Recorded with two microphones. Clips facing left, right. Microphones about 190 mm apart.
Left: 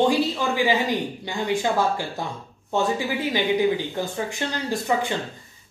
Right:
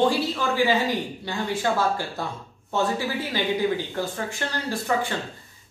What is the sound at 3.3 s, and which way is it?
Speech, 15° left (ahead or behind).